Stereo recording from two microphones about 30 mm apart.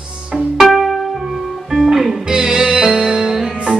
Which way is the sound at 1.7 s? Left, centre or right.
Centre.